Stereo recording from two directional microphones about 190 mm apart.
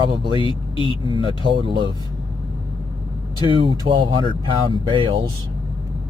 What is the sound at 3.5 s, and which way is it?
Speech, 25° right (ahead or behind).